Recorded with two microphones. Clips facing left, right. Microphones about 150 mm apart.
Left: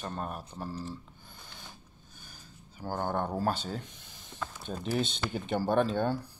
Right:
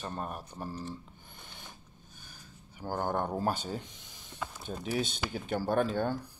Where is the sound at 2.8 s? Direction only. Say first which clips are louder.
Even; 5° right (ahead or behind).